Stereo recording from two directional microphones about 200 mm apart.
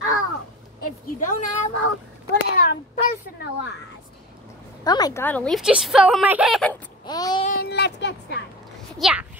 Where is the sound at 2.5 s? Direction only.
50° left (ahead or behind).